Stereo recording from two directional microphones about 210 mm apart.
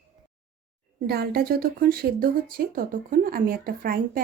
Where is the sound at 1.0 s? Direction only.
50° right (ahead or behind).